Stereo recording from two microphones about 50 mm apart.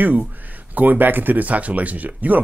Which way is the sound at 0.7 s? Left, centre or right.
Right.